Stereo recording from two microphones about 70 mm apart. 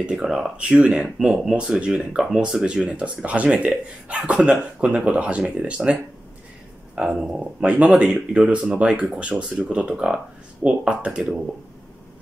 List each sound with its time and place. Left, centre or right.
0.0 s speech: centre
1.0 s speech: centre